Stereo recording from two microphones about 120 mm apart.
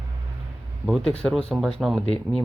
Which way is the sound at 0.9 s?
5° left (ahead or behind).